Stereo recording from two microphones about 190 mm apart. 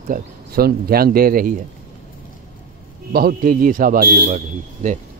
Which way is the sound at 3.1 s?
50° right (ahead or behind).